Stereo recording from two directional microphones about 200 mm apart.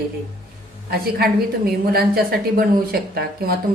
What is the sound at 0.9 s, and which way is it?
A woman's voice, 50° right (ahead or behind).